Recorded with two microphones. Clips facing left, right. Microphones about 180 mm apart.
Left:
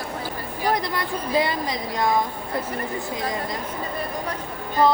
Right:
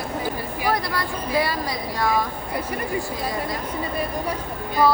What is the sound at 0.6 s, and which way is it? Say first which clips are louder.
Speech: left 1 dB; 20° left (ahead or behind).